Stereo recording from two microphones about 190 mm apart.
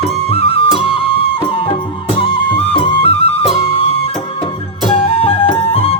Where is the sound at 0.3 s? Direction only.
30° left (ahead or behind).